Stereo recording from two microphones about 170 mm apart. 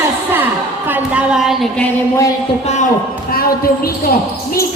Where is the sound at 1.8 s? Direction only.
15° left (ahead or behind).